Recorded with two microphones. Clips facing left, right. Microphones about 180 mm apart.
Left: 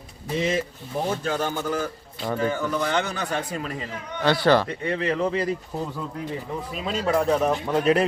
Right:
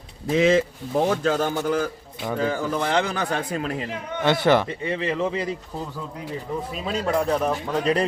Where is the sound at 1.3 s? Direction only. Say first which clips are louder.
Right 3 dB; 40° right (ahead or behind).